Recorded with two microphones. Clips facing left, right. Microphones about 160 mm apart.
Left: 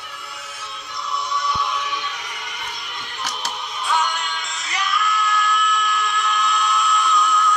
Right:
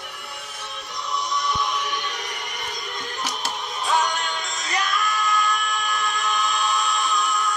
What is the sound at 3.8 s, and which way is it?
Music, 40° right (ahead or behind).